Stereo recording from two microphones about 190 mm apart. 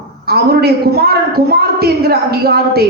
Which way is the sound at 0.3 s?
55° right (ahead or behind).